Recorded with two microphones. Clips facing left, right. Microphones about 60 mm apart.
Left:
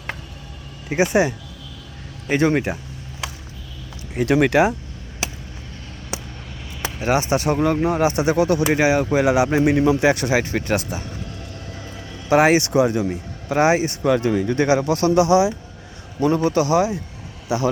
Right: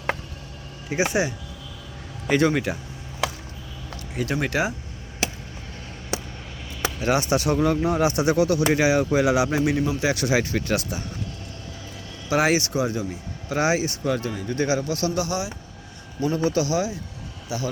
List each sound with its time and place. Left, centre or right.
0.9 s speech: left
2.5 s speech: left
4.2 s speech: left
6.8 s speech: left
10.2 s speech: left
12.3 s speech: left
12.7 s speech: left
14.1 s speech: left
16.2 s speech: left
17.5 s speech: left